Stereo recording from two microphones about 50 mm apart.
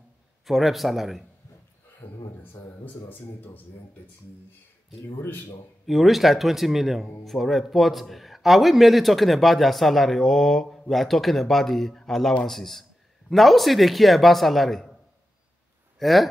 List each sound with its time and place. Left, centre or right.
0.5 s a man's voice: centre
2.0 s speech: left
5.0 s speech: left
5.9 s a man's voice: centre
16.0 s a man's voice: centre